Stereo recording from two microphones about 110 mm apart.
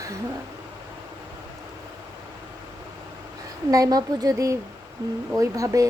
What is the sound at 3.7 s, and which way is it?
A woman's voice, 35° right (ahead or behind).